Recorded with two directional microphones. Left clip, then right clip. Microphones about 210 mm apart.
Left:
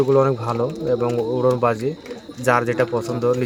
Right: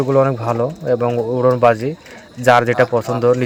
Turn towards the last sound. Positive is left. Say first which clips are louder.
# right 5 dB
turn(degrees=-15)  # may be behind; listen again after turning